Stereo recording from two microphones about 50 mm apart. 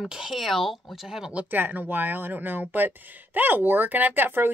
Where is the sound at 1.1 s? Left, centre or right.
Centre.